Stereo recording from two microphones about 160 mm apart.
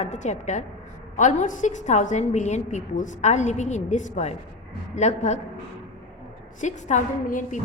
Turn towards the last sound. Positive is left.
turn(degrees=50)  # may be behind; listen again after turning